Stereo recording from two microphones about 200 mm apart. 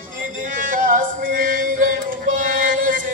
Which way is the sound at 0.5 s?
40° right (ahead or behind).